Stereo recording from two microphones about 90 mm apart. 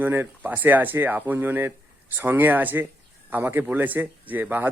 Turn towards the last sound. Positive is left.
turn(degrees=-20)  # may be behind; listen again after turning